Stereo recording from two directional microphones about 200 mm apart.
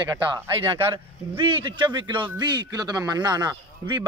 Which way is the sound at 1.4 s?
25° right (ahead or behind).